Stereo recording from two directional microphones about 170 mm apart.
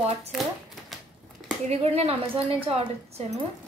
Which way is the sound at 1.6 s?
35° right (ahead or behind).